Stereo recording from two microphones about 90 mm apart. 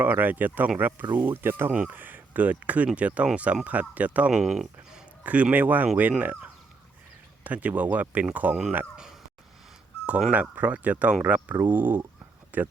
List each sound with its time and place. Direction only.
0.0 s speech: 20° right (ahead or behind)
4.3 s speech: 5° right (ahead or behind)
5.2 s speech: 15° right (ahead or behind)
10.1 s speech: 10° right (ahead or behind)